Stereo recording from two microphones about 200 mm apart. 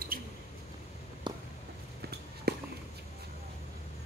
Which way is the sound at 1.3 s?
20° right (ahead or behind).